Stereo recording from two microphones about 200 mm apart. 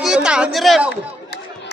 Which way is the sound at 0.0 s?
5° right (ahead or behind).